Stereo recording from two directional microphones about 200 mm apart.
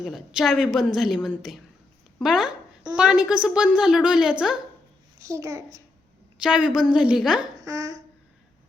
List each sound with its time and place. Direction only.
0.0 s a woman's voice: centre (ahead or behind)
5.2 s a child's voice: 15° right (ahead or behind)
6.3 s a woman's voice: 5° right (ahead or behind)
7.6 s a sound: 20° right (ahead or behind)